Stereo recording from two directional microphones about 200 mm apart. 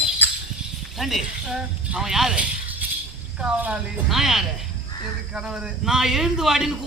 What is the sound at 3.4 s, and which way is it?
A man's voice, 5° right (ahead or behind).